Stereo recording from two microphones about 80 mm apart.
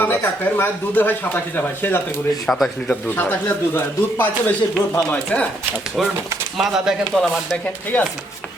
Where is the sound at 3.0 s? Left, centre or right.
Left.